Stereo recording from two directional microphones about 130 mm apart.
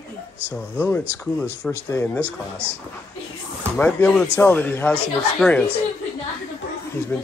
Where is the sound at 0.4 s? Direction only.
15° right (ahead or behind).